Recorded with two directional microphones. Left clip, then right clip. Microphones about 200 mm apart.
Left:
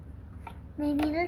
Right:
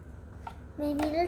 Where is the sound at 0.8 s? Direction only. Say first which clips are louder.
Even; 10° right (ahead or behind).